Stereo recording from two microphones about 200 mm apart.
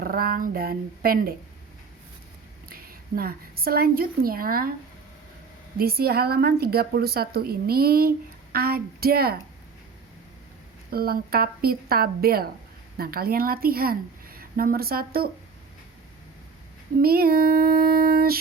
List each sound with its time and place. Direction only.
0.0 s a woman's voice: 45° right (ahead or behind)
2.6 s a woman's voice: 45° right (ahead or behind)
5.7 s a woman's voice: 50° right (ahead or behind)
10.9 s a woman's voice: 50° right (ahead or behind)
17.0 s a woman's voice: 50° right (ahead or behind)